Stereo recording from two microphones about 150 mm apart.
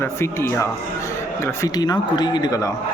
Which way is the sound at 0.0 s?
15° left (ahead or behind).